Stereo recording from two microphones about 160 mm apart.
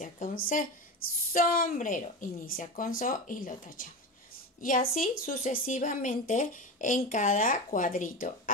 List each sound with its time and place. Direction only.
0.0 s a woman's voice: 55° left (ahead or behind)